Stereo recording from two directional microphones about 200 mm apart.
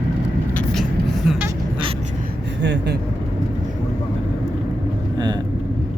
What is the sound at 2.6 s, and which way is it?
Vehicle, 60° right (ahead or behind).